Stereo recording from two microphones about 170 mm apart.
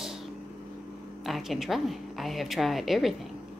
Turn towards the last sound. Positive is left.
turn(degrees=0)  # may be behind; listen again after turning